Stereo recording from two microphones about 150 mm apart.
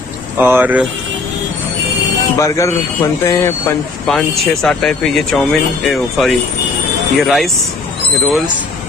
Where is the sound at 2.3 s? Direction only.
20° left (ahead or behind).